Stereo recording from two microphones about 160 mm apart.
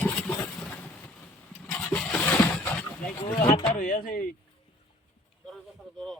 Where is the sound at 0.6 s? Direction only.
10° left (ahead or behind).